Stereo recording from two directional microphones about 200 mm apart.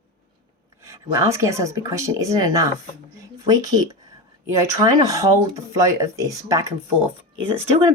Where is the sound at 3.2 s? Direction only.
20° right (ahead or behind).